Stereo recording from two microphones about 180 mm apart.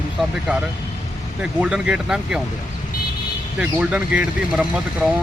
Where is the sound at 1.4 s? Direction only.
5° right (ahead or behind).